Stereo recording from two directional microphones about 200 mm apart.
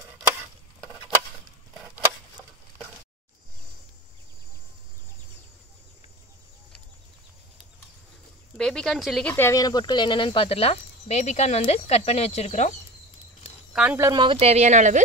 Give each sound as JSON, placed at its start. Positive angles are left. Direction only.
{"t": 8.5, "sound": "speech", "side_deg": 5}
{"t": 9.3, "sound": "speech", "side_deg": 15}
{"t": 13.7, "sound": "speech", "side_deg": -10}